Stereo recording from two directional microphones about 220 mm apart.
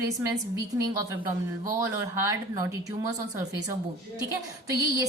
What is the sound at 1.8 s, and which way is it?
A woman's voice, 15° right (ahead or behind).